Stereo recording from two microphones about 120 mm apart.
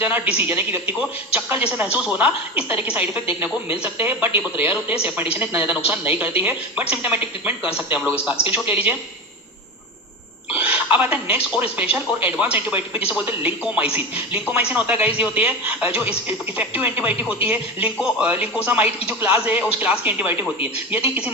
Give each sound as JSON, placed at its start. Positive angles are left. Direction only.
{"t": 0.3, "sound": "a woman's voice", "side_deg": -15}
{"t": 10.5, "sound": "a woman's voice", "side_deg": -10}